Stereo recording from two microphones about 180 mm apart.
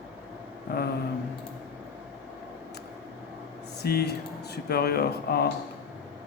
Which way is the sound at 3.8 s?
60° left (ahead or behind).